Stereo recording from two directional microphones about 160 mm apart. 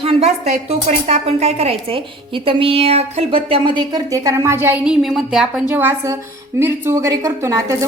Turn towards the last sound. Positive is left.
turn(degrees=-20)  # may be behind; listen again after turning